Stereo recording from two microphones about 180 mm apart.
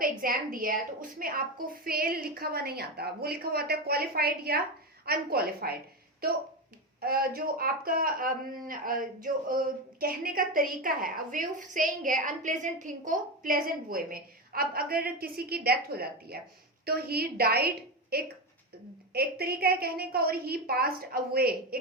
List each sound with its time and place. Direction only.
0.0 s a woman's voice: 50° right (ahead or behind)